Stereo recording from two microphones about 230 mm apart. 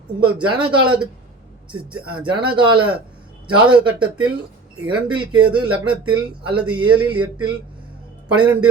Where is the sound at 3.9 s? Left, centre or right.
Centre.